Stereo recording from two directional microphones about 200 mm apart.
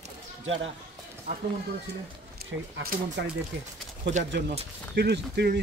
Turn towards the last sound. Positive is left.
turn(degrees=-55)  # may be behind; listen again after turning